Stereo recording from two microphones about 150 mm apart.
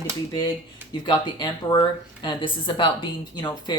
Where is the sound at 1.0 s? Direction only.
30° left (ahead or behind).